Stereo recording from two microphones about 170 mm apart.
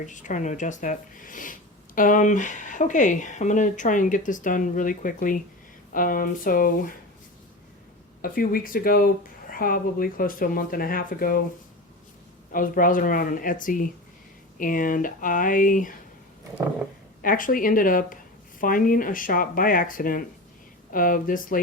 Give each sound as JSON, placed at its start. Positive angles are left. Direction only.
{"t": 0.0, "sound": "speech", "side_deg": 45}
{"t": 8.2, "sound": "speech", "side_deg": 55}
{"t": 12.5, "sound": "speech", "side_deg": 55}
{"t": 17.2, "sound": "speech", "side_deg": 55}